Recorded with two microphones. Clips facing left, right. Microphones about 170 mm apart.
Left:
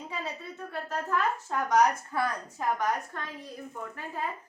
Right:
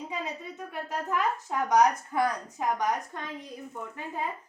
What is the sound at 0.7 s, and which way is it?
Speech, 15° right (ahead or behind).